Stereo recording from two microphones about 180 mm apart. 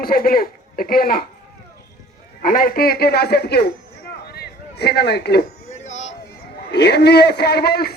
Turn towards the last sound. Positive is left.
turn(degrees=60)  # may be behind; listen again after turning